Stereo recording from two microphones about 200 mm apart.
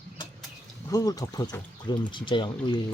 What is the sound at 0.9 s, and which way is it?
Speech, 20° left (ahead or behind).